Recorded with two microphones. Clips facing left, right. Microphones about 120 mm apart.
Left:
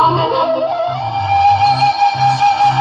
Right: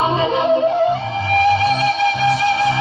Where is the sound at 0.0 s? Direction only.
25° left (ahead or behind).